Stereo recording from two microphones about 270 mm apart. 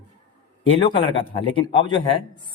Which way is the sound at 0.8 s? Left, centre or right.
Centre.